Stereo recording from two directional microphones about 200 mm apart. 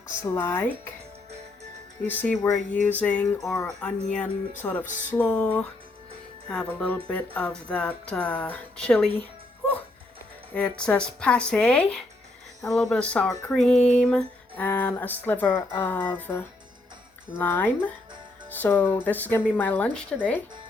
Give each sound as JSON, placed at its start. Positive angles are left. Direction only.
{"t": 0.2, "sound": "speech", "side_deg": 10}
{"t": 2.0, "sound": "speech", "side_deg": 5}
{"t": 10.5, "sound": "speech", "side_deg": 5}